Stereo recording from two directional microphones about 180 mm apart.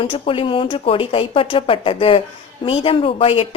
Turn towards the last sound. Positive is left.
turn(degrees=30)  # may be behind; listen again after turning